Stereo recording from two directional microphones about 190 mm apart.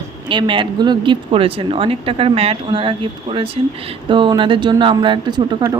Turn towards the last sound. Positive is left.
turn(degrees=-20)  # may be behind; listen again after turning